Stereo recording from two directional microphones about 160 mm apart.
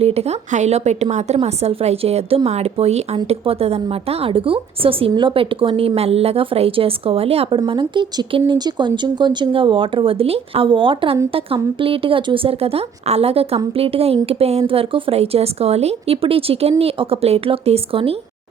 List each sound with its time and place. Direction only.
0.0 s a woman's voice: 40° right (ahead or behind)